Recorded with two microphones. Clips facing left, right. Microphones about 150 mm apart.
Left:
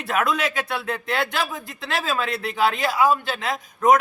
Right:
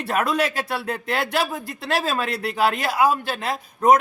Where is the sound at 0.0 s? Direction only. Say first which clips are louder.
Right 1 dB; 35° right (ahead or behind).